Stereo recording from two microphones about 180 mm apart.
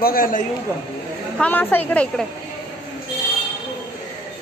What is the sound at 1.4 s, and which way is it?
Speech, 10° left (ahead or behind).